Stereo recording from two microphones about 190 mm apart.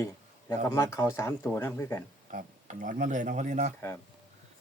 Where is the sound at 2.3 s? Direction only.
45° right (ahead or behind).